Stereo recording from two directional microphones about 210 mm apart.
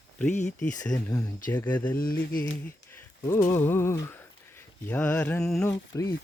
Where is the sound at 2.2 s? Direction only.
45° left (ahead or behind).